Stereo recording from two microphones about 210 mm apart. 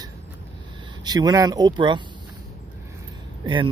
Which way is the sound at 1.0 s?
20° right (ahead or behind).